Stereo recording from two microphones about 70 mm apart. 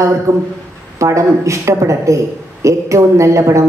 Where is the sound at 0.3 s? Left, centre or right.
Right.